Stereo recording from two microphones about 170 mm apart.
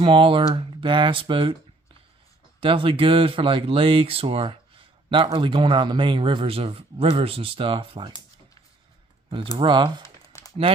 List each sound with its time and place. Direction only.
0.0 s a man's voice: 30° right (ahead or behind)
2.6 s a man's voice: 30° right (ahead or behind)
9.6 s speech: 25° right (ahead or behind)
10.2 s a sound: 20° left (ahead or behind)